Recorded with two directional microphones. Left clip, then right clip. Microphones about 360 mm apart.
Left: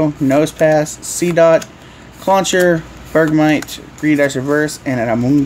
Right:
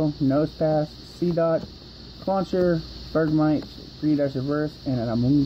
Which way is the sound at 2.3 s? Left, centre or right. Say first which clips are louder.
Left 11 dB; centre.